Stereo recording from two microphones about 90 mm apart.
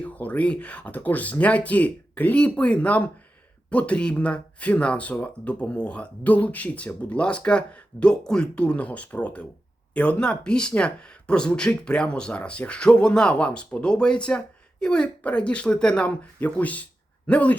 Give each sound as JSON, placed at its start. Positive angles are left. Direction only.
{"t": 0.0, "sound": "speech", "side_deg": 15}